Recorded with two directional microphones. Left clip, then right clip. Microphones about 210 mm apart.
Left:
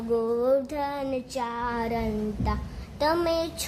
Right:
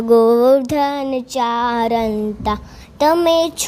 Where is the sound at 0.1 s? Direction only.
40° right (ahead or behind).